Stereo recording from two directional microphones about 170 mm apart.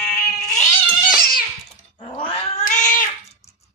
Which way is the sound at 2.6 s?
50° left (ahead or behind).